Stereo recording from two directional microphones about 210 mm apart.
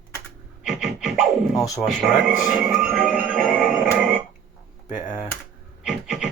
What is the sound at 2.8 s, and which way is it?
Music, 5° right (ahead or behind).